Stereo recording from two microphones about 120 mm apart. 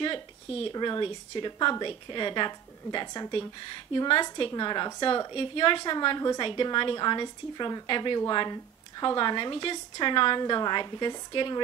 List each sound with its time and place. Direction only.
0.7 s a woman's voice: 35° left (ahead or behind)
5.3 s a woman's voice: 45° left (ahead or behind)